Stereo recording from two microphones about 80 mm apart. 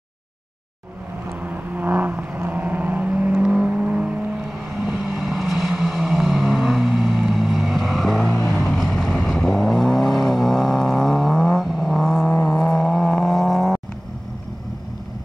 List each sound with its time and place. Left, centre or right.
1.4 s vehicle: right; by 13.7 s centre